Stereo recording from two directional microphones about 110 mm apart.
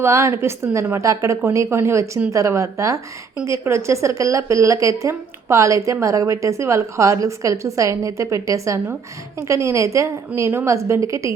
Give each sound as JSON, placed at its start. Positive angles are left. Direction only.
{"t": 0.0, "sound": "speech", "side_deg": -25}